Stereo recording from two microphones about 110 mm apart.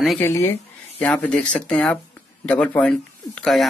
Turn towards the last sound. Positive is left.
turn(degrees=5)  # may be behind; listen again after turning